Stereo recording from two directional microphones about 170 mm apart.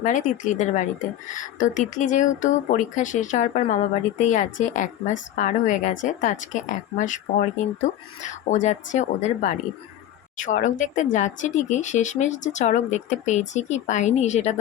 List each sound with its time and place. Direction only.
0.0 s a woman's voice: 50° left (ahead or behind)